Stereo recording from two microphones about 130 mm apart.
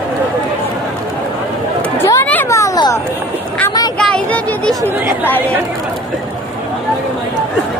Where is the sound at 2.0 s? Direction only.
20° left (ahead or behind).